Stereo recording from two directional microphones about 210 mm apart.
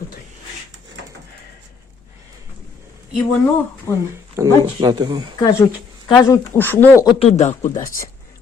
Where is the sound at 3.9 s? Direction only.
10° left (ahead or behind).